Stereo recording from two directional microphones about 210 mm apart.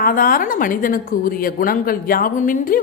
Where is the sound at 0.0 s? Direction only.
40° left (ahead or behind).